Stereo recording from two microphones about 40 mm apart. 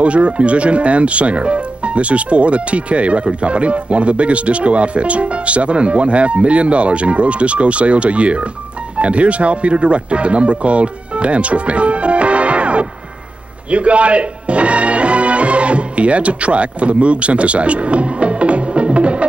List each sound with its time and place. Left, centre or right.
0.0 s speech: right
13.7 s music: right